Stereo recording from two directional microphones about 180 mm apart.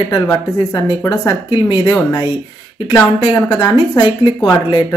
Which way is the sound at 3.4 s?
25° left (ahead or behind).